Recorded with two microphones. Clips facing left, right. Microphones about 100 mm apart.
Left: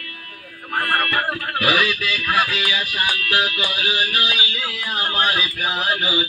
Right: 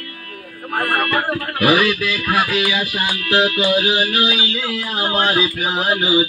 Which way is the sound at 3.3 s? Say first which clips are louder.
Right 12 dB; 25° right (ahead or behind).